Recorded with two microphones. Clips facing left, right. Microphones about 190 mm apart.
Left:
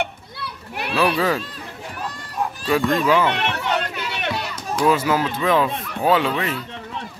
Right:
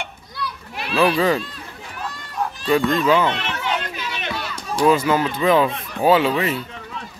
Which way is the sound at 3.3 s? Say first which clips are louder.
Left 2 dB; 65° left (ahead or behind).